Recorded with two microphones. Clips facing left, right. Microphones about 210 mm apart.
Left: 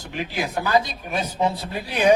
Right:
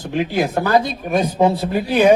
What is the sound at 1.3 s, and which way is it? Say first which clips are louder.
Speech: right 7 dB; 30° right (ahead or behind).